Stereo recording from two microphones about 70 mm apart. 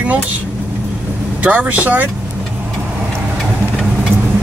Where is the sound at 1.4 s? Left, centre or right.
Centre.